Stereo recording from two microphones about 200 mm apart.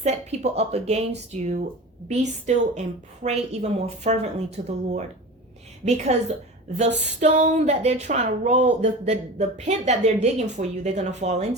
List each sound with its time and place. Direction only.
0.0 s speech: 35° right (ahead or behind)